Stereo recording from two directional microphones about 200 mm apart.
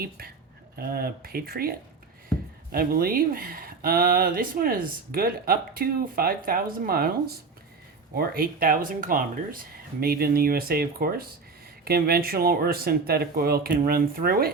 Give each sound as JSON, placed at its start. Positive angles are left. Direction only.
{"t": 0.8, "sound": "speech", "side_deg": -50}
{"t": 2.7, "sound": "speech", "side_deg": -50}